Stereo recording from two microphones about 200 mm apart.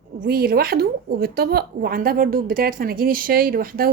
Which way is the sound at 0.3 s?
50° right (ahead or behind).